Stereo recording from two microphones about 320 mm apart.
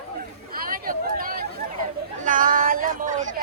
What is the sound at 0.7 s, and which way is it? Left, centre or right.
Chatter, right.